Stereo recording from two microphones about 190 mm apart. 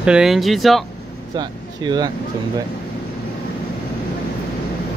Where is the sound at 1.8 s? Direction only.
20° right (ahead or behind).